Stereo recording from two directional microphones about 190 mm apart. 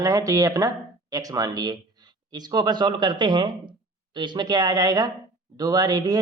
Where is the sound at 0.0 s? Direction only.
20° right (ahead or behind).